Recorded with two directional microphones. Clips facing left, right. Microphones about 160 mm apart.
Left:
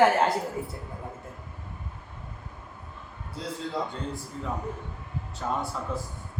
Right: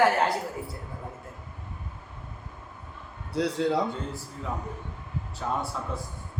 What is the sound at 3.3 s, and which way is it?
Speech, 75° right (ahead or behind).